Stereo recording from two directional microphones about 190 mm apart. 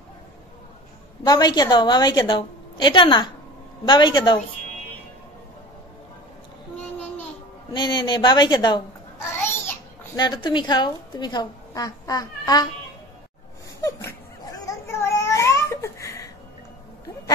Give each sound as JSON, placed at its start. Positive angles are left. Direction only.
{"t": 1.2, "sound": "a woman's voice", "side_deg": 20}
{"t": 7.7, "sound": "a child's voice", "side_deg": 25}
{"t": 14.0, "sound": "a sound", "side_deg": 15}